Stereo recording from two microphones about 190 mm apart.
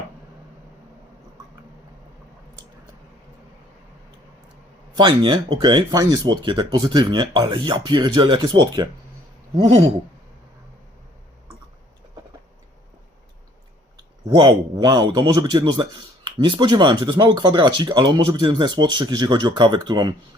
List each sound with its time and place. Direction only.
4.9 s a man's voice: 25° right (ahead or behind)
14.4 s a man's voice: 20° right (ahead or behind)